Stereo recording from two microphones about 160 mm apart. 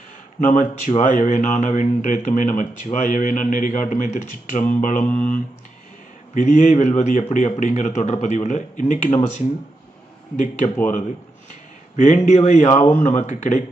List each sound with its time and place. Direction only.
0.3 s speech: 50° left (ahead or behind)
5.0 s speech: 10° left (ahead or behind)
6.3 s speech: 50° left (ahead or behind)
10.3 s speech: 50° left (ahead or behind)
11.9 s speech: 50° left (ahead or behind)